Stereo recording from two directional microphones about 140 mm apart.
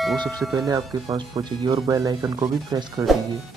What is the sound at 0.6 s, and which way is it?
Speech, 30° right (ahead or behind).